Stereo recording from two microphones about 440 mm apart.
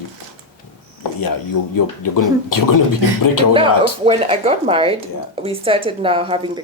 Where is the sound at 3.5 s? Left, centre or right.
Centre.